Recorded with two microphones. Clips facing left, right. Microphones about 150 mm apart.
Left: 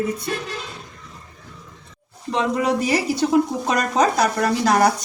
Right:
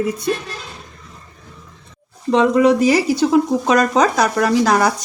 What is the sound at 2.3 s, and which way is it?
Speech, 90° right.